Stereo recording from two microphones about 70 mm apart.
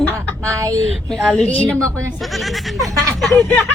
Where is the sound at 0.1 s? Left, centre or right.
Right.